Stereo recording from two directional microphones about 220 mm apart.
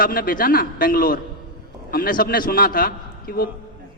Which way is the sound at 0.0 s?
40° left (ahead or behind).